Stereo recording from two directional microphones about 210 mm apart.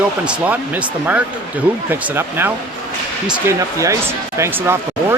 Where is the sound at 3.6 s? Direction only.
15° right (ahead or behind).